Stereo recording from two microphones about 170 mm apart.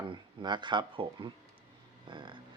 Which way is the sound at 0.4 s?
25° right (ahead or behind).